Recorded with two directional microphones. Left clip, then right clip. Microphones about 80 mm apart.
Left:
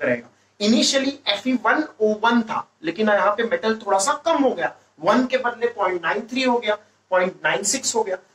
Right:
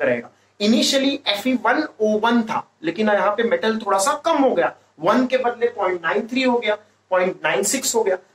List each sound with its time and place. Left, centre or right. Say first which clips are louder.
0.0 s speech: right 2 dB; right
0.6 s speech: right 1 dB; right